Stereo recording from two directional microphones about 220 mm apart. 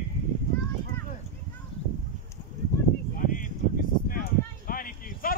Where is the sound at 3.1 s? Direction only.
40° left (ahead or behind).